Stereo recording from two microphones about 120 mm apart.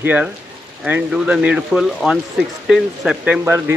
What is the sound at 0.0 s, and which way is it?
Speech, 15° right (ahead or behind).